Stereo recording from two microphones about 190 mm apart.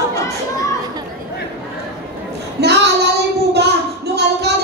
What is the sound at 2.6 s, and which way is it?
Female singing, 60° right (ahead or behind).